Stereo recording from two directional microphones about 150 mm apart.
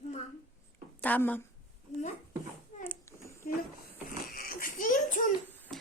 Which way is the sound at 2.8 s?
15° left (ahead or behind).